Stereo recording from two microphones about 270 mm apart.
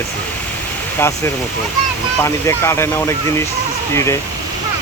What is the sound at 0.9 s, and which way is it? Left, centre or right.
Speech, centre.